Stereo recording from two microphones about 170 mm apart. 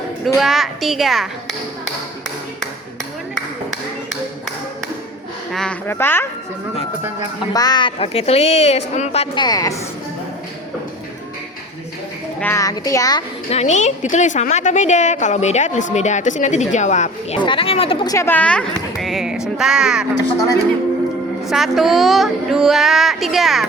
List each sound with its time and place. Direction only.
0.3 s speech: centre (ahead or behind)
5.5 s a sound: centre (ahead or behind)
5.9 s speech: 10° left (ahead or behind)
7.5 s a woman's voice: 25° left (ahead or behind)
12.4 s speech: 15° left (ahead or behind)
13.5 s a woman's voice: 40° left (ahead or behind)
17.3 s a woman's voice: 30° left (ahead or behind)
18.1 s speech: 15° left (ahead or behind); by 20.1 s 5° right (ahead or behind)
21.4 s speech: centre (ahead or behind)